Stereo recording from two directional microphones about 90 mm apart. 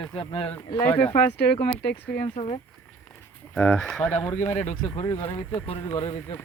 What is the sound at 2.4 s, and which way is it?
Speech, 60° left (ahead or behind).